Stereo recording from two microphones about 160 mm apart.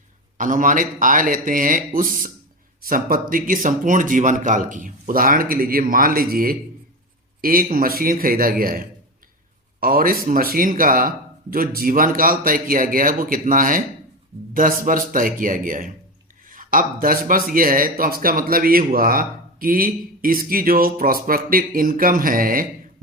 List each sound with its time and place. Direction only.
0.3 s speech: 55° right (ahead or behind)